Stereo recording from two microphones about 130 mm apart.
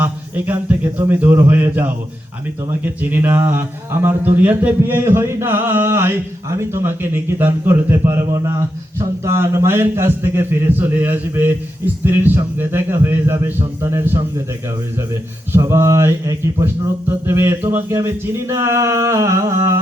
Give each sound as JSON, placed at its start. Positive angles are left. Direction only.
{"t": 0.0, "sound": "a man's voice", "side_deg": -15}